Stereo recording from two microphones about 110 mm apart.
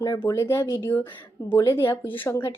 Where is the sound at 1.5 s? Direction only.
35° left (ahead or behind).